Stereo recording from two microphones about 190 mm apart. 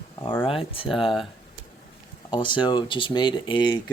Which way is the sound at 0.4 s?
30° left (ahead or behind).